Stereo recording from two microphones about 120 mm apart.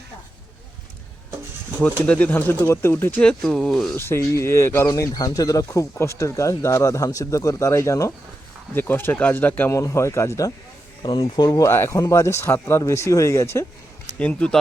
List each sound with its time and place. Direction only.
1.8 s speech: 10° left (ahead or behind)
3.9 s speech: 20° left (ahead or behind)
11.0 s speech: 40° left (ahead or behind); by 13.7 s 25° left (ahead or behind)
14.2 s speech: 10° left (ahead or behind)